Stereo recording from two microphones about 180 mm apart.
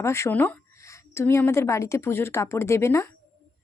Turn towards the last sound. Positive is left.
turn(degrees=15)  # may be behind; listen again after turning